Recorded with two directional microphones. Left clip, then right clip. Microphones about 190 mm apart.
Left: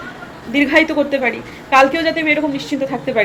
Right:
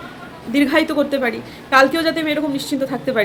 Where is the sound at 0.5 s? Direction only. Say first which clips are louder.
Left 3 dB; 20° right (ahead or behind).